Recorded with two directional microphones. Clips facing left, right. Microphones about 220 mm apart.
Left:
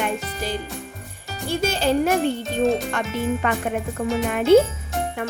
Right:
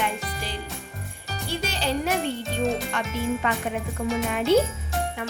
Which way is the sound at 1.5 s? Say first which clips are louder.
Left 7 dB; 45° left (ahead or behind).